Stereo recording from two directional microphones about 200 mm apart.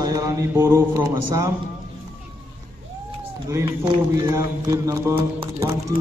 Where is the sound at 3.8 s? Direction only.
20° right (ahead or behind).